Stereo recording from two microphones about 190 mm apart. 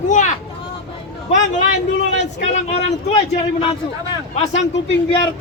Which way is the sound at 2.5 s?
35° left (ahead or behind).